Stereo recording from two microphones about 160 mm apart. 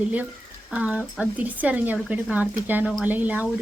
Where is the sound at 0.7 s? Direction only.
5° right (ahead or behind).